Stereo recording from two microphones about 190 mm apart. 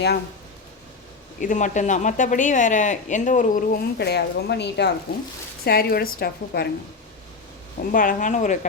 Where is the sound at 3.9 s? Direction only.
60° left (ahead or behind).